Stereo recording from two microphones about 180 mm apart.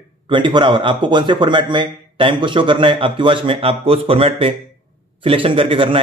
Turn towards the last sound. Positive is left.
turn(degrees=-30)  # may be behind; listen again after turning